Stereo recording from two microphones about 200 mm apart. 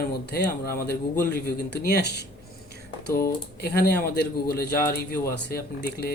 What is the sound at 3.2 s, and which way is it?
Speech, 50° left (ahead or behind).